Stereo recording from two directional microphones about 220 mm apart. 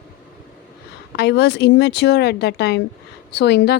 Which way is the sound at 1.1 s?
50° left (ahead or behind).